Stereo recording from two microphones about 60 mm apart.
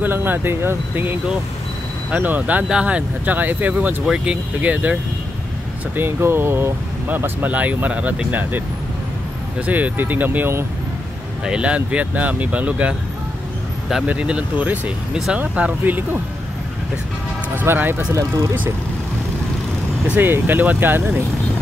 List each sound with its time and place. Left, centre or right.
0.0 s speech: right
2.0 s speech: right
4.0 s speech: centre
5.9 s speech: right
9.7 s speech: right
11.4 s speech: centre
14.0 s speech: centre; by 16.2 s right
17.6 s speech: right
18.1 s speech: right
20.2 s speech: right